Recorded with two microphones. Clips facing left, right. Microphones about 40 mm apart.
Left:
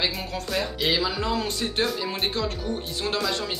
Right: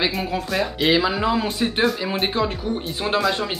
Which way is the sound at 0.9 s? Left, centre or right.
Right.